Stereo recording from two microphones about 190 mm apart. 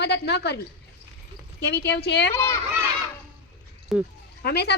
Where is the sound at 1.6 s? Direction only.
60° left (ahead or behind).